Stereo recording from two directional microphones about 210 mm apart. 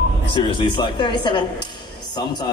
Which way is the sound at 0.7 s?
20° left (ahead or behind).